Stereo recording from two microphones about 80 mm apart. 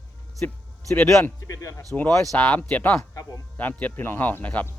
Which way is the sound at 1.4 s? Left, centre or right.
Left.